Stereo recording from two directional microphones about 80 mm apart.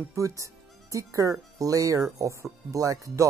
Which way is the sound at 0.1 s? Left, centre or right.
Right.